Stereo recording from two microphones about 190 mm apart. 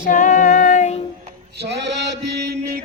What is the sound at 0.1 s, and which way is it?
Female singing, 40° left (ahead or behind).